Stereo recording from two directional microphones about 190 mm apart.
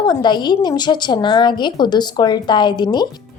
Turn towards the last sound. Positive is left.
turn(degrees=20)  # may be behind; listen again after turning